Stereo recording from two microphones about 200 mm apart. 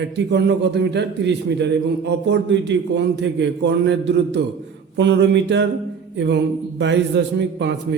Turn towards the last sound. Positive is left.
turn(degrees=-60)  # may be behind; listen again after turning